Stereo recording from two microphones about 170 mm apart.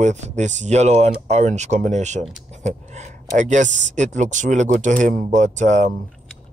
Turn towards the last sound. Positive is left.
turn(degrees=-45)  # may be behind; listen again after turning